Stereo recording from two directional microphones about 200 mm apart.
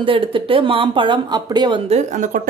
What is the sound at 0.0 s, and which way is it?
Speech, 25° right (ahead or behind).